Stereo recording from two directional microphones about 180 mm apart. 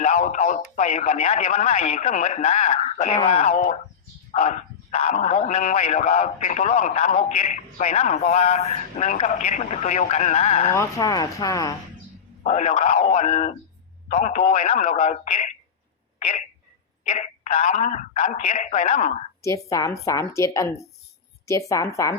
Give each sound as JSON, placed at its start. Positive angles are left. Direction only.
{"t": 0.0, "sound": "speech", "side_deg": 40}
{"t": 10.7, "sound": "speech", "side_deg": 15}
{"t": 12.5, "sound": "speech", "side_deg": 40}
{"t": 16.1, "sound": "a sound", "side_deg": 40}
{"t": 17.0, "sound": "a woman's voice", "side_deg": 45}
{"t": 19.4, "sound": "speech", "side_deg": 15}